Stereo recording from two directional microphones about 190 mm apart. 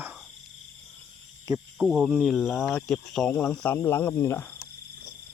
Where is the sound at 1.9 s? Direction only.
5° right (ahead or behind); by 4.5 s 15° left (ahead or behind).